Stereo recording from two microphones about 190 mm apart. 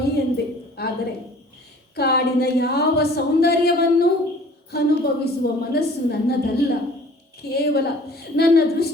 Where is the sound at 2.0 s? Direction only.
60° left (ahead or behind).